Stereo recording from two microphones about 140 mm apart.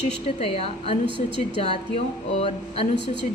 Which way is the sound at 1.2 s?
35° right (ahead or behind).